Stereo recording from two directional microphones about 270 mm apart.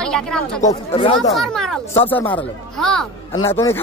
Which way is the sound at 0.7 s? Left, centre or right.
Centre.